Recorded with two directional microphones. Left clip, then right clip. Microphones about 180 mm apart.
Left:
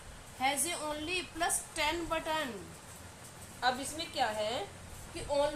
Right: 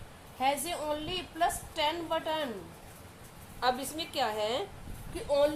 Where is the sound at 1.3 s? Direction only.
40° right (ahead or behind).